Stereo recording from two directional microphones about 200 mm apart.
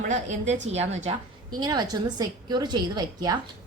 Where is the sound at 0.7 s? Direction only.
35° right (ahead or behind).